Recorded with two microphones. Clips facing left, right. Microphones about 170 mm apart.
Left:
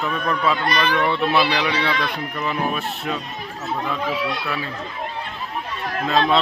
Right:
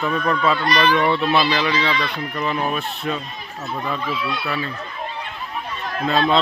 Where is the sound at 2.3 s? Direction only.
5° left (ahead or behind).